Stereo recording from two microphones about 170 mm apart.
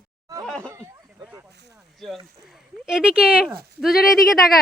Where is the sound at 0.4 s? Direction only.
5° left (ahead or behind).